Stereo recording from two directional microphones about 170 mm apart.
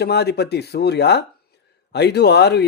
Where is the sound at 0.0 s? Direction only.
75° left (ahead or behind).